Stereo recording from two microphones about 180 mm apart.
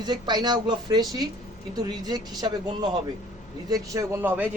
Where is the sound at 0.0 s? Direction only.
25° right (ahead or behind).